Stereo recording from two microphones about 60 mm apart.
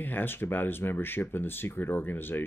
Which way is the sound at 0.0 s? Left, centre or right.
Left.